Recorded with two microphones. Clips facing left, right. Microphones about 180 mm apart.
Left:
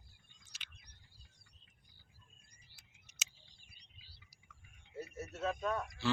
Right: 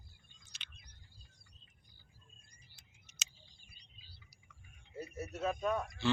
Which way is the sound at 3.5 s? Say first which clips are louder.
Right 2 dB; 70° left (ahead or behind).